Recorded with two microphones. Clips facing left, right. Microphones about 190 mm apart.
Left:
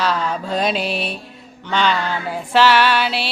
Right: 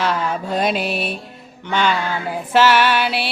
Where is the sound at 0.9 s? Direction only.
50° right (ahead or behind).